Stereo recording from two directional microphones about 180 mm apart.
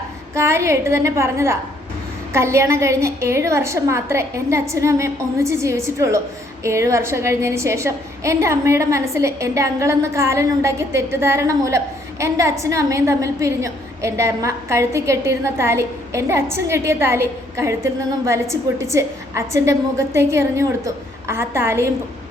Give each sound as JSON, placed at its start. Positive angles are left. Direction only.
{"t": 0.3, "sound": "a woman's voice", "side_deg": -15}
{"t": 18.8, "sound": "a woman's voice", "side_deg": -15}